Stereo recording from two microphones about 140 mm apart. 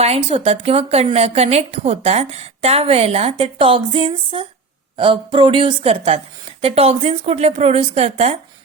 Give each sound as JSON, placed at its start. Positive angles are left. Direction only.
{"t": 0.0, "sound": "a woman's voice", "side_deg": -45}